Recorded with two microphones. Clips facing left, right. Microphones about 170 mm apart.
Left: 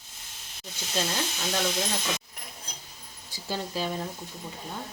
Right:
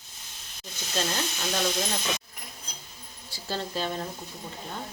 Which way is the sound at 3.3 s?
10° left (ahead or behind).